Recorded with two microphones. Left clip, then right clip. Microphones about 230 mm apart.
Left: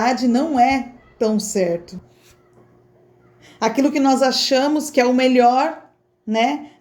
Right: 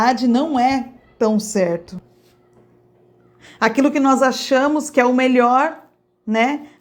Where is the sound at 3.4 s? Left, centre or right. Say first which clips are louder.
Right 2 dB; centre.